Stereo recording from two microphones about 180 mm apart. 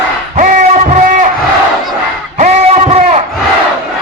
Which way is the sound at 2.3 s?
40° right (ahead or behind).